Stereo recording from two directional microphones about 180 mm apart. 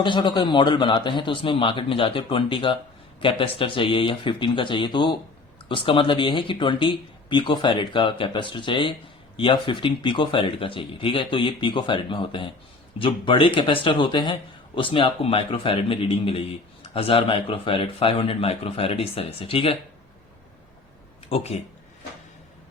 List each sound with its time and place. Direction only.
0.0 s speech: 25° left (ahead or behind)
21.2 s speech: 35° left (ahead or behind)